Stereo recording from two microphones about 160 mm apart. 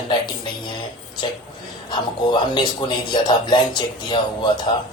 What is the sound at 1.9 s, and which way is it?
Speech, 30° left (ahead or behind).